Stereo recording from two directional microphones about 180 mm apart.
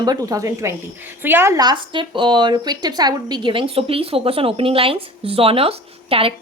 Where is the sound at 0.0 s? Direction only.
20° right (ahead or behind).